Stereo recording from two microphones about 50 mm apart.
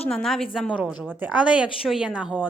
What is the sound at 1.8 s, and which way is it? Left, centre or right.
Speech, centre.